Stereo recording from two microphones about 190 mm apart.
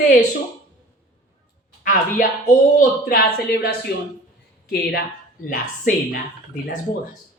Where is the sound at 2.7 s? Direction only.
55° left (ahead or behind).